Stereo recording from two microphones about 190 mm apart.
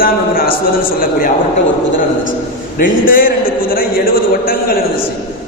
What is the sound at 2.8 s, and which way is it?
A man's voice, 45° left (ahead or behind).